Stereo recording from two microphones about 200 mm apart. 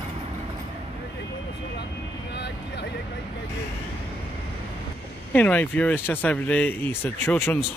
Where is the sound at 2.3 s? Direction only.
60° left (ahead or behind).